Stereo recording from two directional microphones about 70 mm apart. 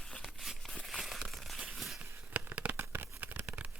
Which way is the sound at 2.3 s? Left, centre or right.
Right.